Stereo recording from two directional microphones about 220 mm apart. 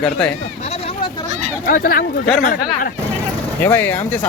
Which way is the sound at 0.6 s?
30° left (ahead or behind).